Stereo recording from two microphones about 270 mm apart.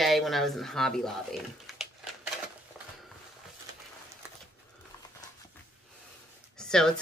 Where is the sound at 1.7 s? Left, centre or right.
Centre.